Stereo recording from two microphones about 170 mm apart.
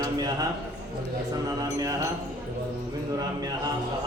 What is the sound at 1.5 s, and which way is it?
Speech, 20° right (ahead or behind).